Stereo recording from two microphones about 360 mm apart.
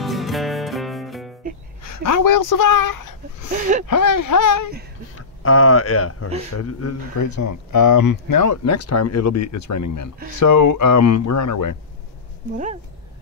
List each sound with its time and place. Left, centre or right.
0.0 s music: centre
1.8 s speech: left
5.1 s speech: left